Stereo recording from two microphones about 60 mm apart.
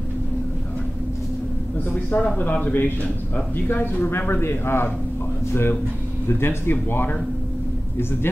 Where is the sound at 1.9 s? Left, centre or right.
Left.